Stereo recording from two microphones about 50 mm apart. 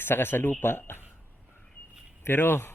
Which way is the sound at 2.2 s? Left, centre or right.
Left.